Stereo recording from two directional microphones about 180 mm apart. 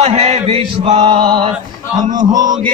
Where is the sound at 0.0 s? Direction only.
40° right (ahead or behind); by 2.5 s 20° right (ahead or behind).